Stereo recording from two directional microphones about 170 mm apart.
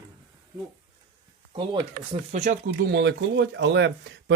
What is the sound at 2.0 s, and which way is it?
Speech, 65° right (ahead or behind).